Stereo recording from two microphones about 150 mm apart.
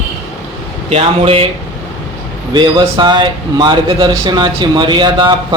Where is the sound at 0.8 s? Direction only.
40° right (ahead or behind).